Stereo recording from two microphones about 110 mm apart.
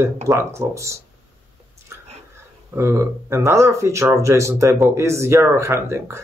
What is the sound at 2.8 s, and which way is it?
Speech, 25° right (ahead or behind).